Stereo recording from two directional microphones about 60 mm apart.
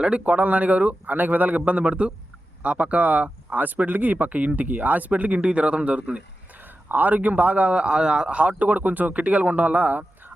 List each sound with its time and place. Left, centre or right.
0.0 s speech: right